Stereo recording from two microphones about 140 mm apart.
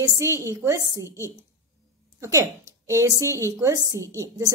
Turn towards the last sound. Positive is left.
turn(degrees=-25)  # may be behind; listen again after turning